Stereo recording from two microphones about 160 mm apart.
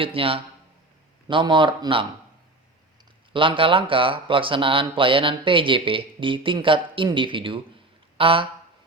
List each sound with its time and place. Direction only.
0.0 s speech: 35° right (ahead or behind)
3.3 s speech: 30° right (ahead or behind)